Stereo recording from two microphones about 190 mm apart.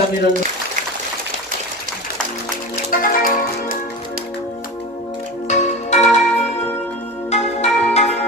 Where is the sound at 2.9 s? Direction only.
45° left (ahead or behind).